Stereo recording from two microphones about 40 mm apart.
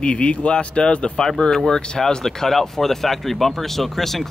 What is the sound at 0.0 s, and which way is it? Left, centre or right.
Speech, left.